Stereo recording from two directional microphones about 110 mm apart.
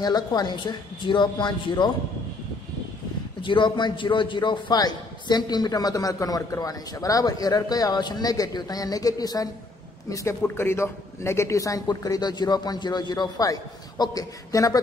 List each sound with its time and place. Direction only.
0.0 s speech: 40° left (ahead or behind)
3.4 s a man's voice: 45° left (ahead or behind)